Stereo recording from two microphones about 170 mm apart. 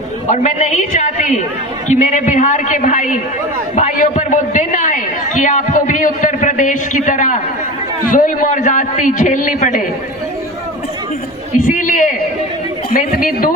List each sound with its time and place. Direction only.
0.3 s a man's voice: 40° left (ahead or behind)
11.6 s a man's voice: 50° left (ahead or behind)